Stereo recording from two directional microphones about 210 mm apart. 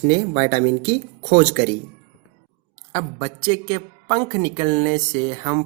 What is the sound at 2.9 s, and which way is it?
A woman's voice, 25° right (ahead or behind).